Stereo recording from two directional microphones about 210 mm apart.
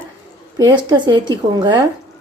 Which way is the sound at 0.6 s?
20° right (ahead or behind).